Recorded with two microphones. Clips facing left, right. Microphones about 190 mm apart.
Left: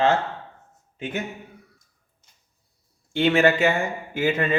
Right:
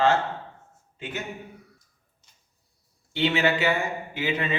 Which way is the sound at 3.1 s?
50° left (ahead or behind).